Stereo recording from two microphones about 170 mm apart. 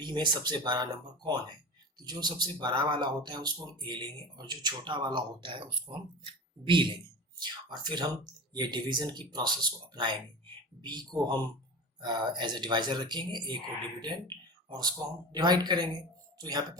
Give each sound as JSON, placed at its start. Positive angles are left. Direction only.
{"t": 0.0, "sound": "speech", "side_deg": -25}